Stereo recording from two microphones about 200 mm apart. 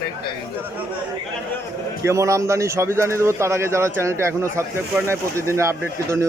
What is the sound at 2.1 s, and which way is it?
Speech, 15° right (ahead or behind).